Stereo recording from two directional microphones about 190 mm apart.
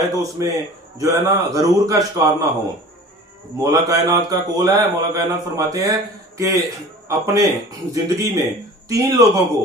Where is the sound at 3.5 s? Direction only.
20° right (ahead or behind).